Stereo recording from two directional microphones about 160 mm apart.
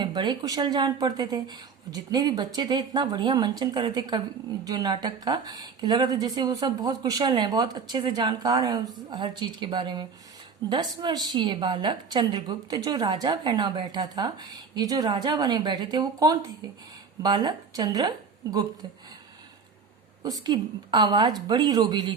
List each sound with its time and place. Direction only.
0.0 s a woman's voice: 30° right (ahead or behind)
20.2 s a woman's voice: 25° right (ahead or behind)